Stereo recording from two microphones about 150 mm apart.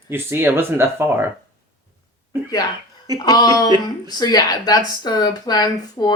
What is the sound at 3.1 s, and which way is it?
Speech, 25° left (ahead or behind).